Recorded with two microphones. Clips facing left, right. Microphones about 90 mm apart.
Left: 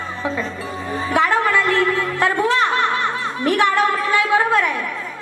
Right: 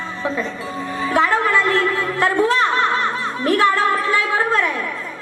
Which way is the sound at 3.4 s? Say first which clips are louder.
Even; 20° left (ahead or behind).